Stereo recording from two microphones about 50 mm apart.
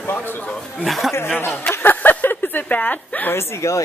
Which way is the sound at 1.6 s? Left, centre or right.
Left.